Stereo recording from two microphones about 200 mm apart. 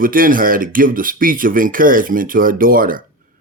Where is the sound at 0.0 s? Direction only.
45° right (ahead or behind).